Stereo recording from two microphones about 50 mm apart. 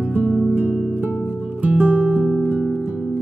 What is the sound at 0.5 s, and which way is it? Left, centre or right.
Music, right.